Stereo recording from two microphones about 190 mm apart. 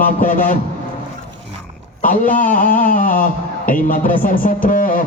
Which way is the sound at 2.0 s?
45° left (ahead or behind).